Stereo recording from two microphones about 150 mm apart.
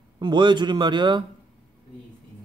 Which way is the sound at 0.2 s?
30° right (ahead or behind).